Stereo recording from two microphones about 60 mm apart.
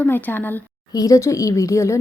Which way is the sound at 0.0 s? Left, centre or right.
Left.